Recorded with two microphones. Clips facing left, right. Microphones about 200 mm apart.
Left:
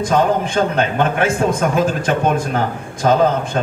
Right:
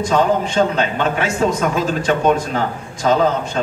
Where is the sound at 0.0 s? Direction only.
55° left (ahead or behind).